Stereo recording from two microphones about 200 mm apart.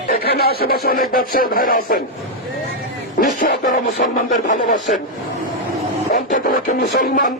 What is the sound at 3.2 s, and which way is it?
Music, 45° left (ahead or behind).